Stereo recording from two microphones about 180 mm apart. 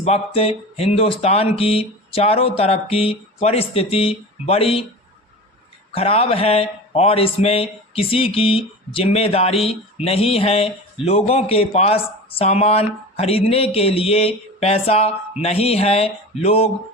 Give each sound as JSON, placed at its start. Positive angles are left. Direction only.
{"t": 0.0, "sound": "speech", "side_deg": 35}
{"t": 5.9, "sound": "speech", "side_deg": 30}